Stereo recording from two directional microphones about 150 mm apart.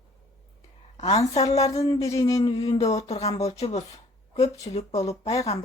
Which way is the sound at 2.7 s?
45° left (ahead or behind).